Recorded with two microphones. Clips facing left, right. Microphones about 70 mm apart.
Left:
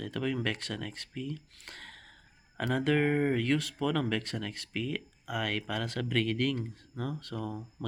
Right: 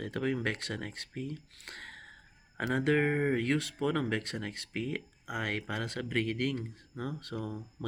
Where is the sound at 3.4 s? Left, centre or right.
Right.